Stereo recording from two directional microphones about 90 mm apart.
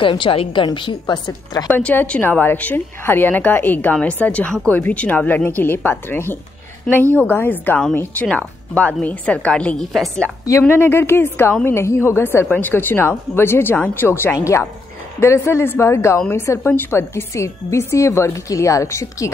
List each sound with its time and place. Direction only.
0.0 s a woman's voice: 65° left (ahead or behind)
0.8 s a woman's voice: 55° left (ahead or behind)
1.7 s a woman's voice: 20° left (ahead or behind)
10.7 s a woman's voice: 25° left (ahead or behind)